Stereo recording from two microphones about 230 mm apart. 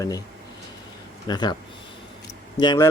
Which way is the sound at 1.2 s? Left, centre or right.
Centre.